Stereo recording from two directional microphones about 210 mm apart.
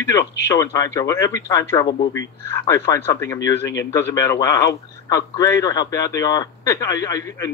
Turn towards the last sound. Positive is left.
turn(degrees=15)  # may be behind; listen again after turning